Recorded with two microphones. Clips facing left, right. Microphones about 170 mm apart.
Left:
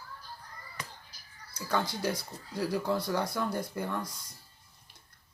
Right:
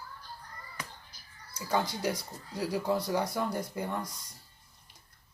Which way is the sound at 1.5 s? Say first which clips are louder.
Right 1 dB; 15° right (ahead or behind).